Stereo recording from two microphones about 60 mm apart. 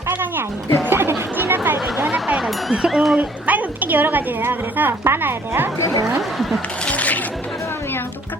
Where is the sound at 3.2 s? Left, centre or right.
Right.